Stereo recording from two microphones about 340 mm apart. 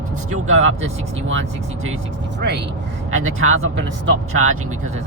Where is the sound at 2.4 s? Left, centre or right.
Right.